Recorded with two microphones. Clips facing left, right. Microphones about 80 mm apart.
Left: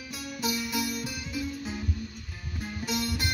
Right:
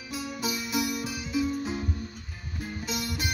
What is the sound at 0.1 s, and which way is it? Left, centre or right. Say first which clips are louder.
Music: right 1 dB; centre.